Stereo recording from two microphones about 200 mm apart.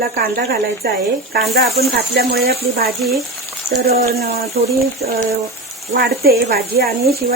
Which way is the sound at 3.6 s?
50° right (ahead or behind).